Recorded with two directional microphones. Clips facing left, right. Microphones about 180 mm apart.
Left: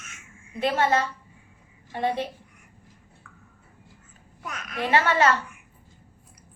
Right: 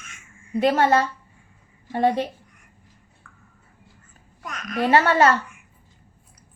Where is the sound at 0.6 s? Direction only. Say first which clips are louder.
Right 5 dB; 45° right (ahead or behind).